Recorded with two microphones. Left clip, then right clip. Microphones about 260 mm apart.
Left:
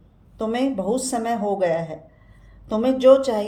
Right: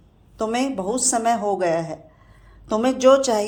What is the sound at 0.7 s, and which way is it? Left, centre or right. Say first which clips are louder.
Speech: left 1 dB; right.